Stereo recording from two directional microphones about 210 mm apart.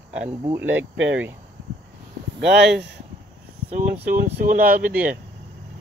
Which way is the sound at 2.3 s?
55° right (ahead or behind).